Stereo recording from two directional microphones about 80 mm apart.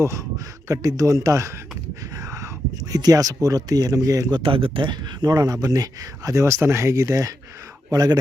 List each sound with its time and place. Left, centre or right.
0.0 s speech: right
4.3 s speech: right
7.9 s speech: right